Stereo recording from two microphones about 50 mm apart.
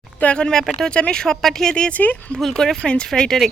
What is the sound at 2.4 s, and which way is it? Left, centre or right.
Speech, centre.